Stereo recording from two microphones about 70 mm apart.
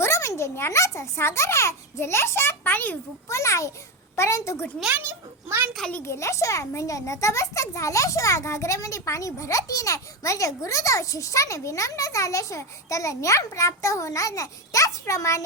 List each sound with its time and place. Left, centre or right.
0.0 s a child's voice: left
3.2 s a child's voice: left
5.0 s a child's voice: right
6.1 s a child's voice: left